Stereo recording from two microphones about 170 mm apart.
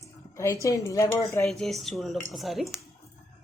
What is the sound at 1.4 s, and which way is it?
Speech, centre (ahead or behind).